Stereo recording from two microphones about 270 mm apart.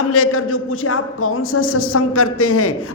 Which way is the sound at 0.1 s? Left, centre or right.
Left.